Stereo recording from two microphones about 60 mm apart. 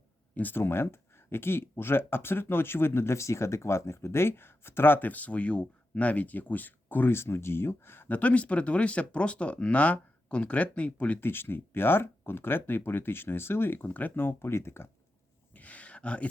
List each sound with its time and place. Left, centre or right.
0.3 s speech: left
8.0 s speech: left
11.2 s speech: left
15.5 s a sound: left